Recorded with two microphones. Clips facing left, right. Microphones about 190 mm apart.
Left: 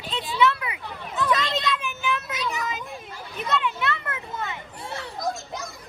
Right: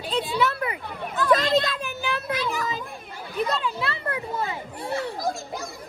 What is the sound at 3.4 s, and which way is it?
Children playing, 35° right (ahead or behind).